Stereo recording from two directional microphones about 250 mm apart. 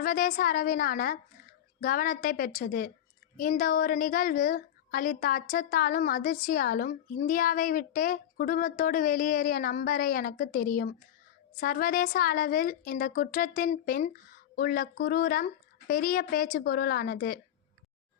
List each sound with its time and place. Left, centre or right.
0.0 s a woman's voice: left